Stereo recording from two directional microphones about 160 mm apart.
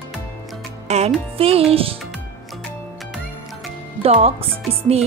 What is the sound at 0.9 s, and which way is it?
Speech, 45° right (ahead or behind).